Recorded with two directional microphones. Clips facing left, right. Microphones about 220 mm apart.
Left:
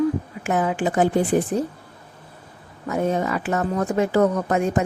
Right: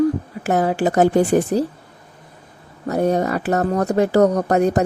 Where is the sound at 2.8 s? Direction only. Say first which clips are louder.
Right 4 dB; 40° right (ahead or behind).